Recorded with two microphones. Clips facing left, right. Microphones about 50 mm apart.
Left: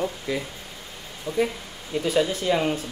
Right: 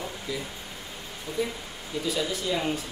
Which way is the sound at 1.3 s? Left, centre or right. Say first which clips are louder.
Left 6 dB; left.